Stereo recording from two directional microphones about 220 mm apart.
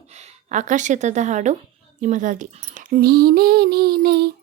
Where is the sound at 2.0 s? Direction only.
35° right (ahead or behind).